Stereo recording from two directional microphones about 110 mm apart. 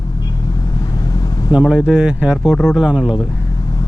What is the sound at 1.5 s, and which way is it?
Speech, 45° left (ahead or behind).